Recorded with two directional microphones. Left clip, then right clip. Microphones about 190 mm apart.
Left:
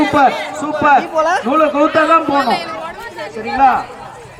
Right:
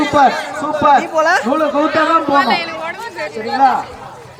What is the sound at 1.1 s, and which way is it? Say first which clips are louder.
Speech: right 1 dB; 20° right (ahead or behind).